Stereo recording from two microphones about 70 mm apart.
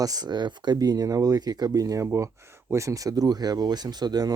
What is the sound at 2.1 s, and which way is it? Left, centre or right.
Speech, right.